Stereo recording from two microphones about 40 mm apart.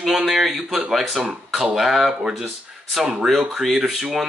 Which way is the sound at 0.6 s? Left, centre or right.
Right.